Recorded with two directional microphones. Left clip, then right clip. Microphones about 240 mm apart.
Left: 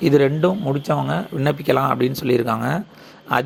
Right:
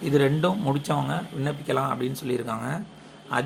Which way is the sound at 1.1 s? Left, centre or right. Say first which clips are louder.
Left 8 dB; left.